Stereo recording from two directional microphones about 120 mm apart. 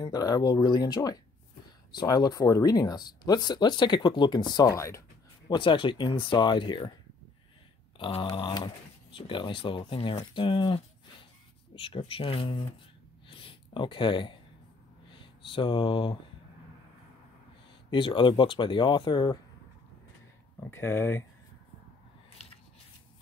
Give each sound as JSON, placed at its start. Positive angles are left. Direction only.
{"t": 0.0, "sound": "speech", "side_deg": 30}
{"t": 4.7, "sound": "speech", "side_deg": 25}
{"t": 5.5, "sound": "speech", "side_deg": 40}
{"t": 8.0, "sound": "speech", "side_deg": 50}
{"t": 13.3, "sound": "a sound", "side_deg": 45}
{"t": 15.0, "sound": "speech", "side_deg": 45}
{"t": 17.9, "sound": "speech", "side_deg": 45}
{"t": 20.6, "sound": "speech", "side_deg": 20}